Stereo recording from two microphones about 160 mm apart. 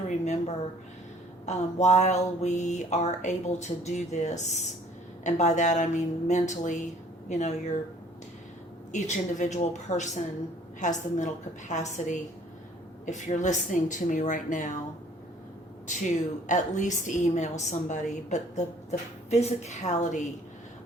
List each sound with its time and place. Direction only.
0.1 s a sound: 45° left (ahead or behind)
1.5 s a woman's voice: 45° left (ahead or behind)
8.9 s a woman's voice: 50° left (ahead or behind)
15.9 s a woman's voice: 50° left (ahead or behind)